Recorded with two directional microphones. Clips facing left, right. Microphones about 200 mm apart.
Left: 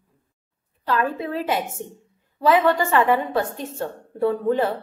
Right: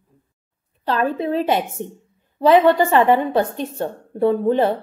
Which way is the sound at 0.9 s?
25° right (ahead or behind).